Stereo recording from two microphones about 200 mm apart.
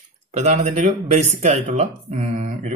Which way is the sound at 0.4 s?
35° right (ahead or behind).